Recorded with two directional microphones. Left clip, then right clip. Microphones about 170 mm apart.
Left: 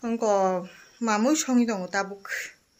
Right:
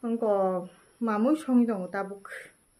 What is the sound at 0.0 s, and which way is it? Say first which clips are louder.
Speech: left 3 dB; 5° right (ahead or behind).